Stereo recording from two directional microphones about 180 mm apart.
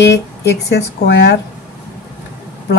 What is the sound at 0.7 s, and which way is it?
Speech, 70° left (ahead or behind).